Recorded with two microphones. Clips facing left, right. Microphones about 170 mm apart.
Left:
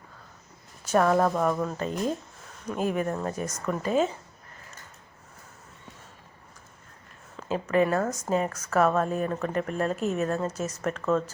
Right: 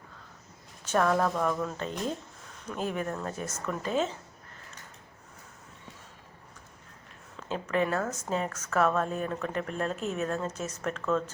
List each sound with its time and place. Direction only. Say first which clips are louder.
0.9 s speech: left 4 dB; 15° left (ahead or behind)
1.6 s speech: left 4 dB; 5° left (ahead or behind)
7.4 s speech: left 5 dB; 5° left (ahead or behind)